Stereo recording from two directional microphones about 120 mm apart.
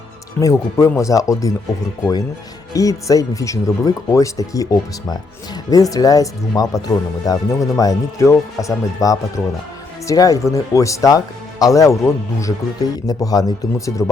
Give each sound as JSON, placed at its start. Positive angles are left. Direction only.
{"t": 0.3, "sound": "speech", "side_deg": 25}
{"t": 2.7, "sound": "speech", "side_deg": 30}